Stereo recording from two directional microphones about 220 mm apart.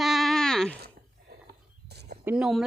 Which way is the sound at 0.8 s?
40° right (ahead or behind).